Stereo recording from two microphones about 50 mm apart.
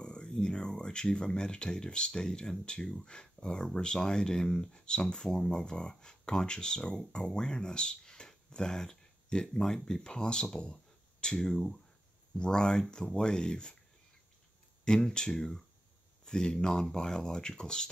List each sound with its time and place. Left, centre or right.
0.0 s speech: centre
14.9 s speech: centre